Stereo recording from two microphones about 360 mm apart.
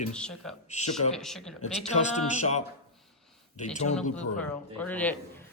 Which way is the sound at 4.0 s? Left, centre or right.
Centre.